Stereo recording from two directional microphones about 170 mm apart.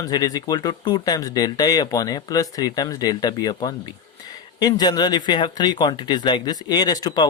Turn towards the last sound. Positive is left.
turn(degrees=20)  # may be behind; listen again after turning